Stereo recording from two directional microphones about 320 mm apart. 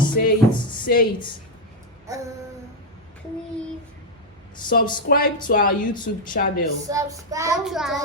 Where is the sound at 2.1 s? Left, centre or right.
Centre.